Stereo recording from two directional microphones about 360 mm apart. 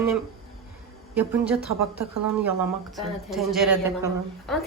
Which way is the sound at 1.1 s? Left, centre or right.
Centre.